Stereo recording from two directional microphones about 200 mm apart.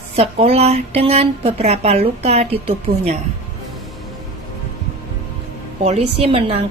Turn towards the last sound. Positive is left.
turn(degrees=-30)  # may be behind; listen again after turning